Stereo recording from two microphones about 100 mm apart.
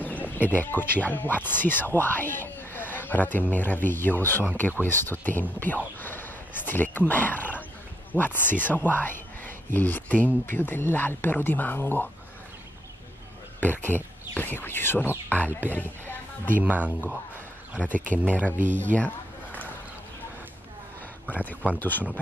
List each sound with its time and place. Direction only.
0.5 s speech: 20° left (ahead or behind)
13.6 s speech: 20° left (ahead or behind)
16.5 s speech: 15° right (ahead or behind)
17.8 s a man's voice: 20° left (ahead or behind)
21.3 s speech: 15° left (ahead or behind)